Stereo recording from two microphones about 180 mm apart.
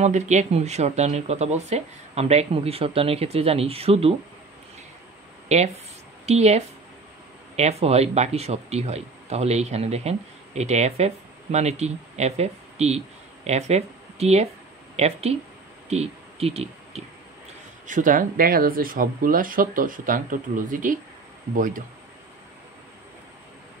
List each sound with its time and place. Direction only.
0.0 s speech: 40° right (ahead or behind)
5.5 s speech: 35° right (ahead or behind)
17.8 s speech: 45° right (ahead or behind)